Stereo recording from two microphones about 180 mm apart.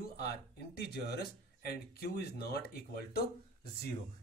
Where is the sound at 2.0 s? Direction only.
60° left (ahead or behind).